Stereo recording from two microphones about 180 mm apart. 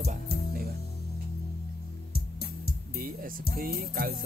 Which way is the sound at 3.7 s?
55° right (ahead or behind).